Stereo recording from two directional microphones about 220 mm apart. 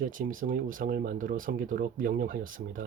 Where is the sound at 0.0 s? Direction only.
40° right (ahead or behind).